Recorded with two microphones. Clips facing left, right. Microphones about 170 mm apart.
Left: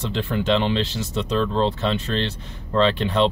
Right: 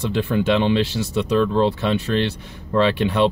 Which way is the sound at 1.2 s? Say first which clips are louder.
Right 3 dB; 10° right (ahead or behind).